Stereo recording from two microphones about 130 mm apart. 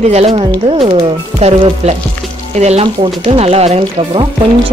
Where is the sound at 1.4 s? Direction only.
55° right (ahead or behind).